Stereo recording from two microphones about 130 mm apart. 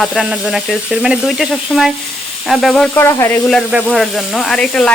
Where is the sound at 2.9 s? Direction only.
20° left (ahead or behind).